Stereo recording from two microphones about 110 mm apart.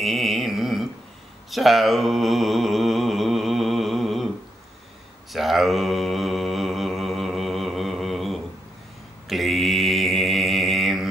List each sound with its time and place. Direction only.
0.0 s a sound: centre (ahead or behind)
1.5 s mantra: centre (ahead or behind)
5.3 s mantra: centre (ahead or behind)